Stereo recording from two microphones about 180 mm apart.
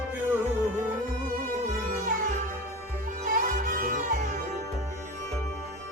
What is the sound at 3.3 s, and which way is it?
Music, 50° right (ahead or behind).